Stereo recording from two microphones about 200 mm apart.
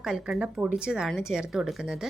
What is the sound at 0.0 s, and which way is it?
Speech, 5° right (ahead or behind).